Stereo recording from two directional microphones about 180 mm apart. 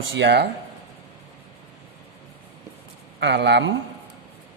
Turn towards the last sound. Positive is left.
turn(degrees=-75)  # may be behind; listen again after turning